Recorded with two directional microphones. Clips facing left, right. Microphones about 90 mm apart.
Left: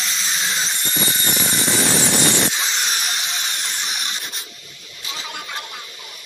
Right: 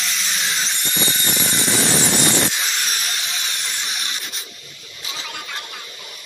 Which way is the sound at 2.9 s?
25° left (ahead or behind).